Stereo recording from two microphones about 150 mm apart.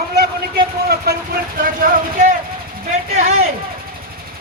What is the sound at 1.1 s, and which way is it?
Speech, 90° right.